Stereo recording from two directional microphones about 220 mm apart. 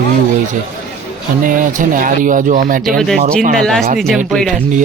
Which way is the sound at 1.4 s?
35° right (ahead or behind).